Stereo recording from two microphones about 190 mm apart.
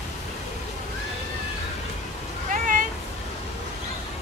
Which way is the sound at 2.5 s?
45° right (ahead or behind).